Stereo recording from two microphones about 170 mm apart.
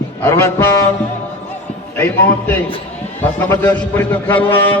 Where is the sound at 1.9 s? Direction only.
10° left (ahead or behind).